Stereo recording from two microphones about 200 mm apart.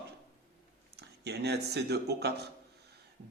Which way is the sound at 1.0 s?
55° right (ahead or behind).